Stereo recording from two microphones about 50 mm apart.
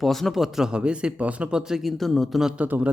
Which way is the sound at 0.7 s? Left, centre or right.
Right.